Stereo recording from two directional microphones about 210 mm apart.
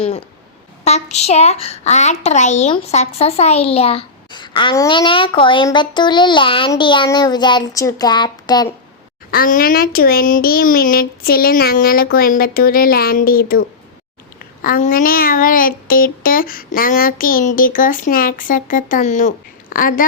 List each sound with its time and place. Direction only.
0.9 s a child's voice: 30° left (ahead or behind)
9.3 s speech: 45° left (ahead or behind)
14.6 s child singing: 40° left (ahead or behind)